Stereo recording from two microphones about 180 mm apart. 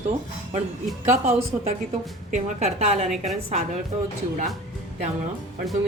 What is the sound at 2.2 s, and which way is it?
Speech, 40° right (ahead or behind).